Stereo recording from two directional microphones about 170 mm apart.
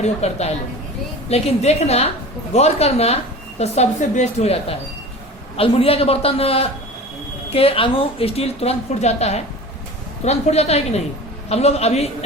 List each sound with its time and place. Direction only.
0.0 s a woman's voice: 40° left (ahead or behind)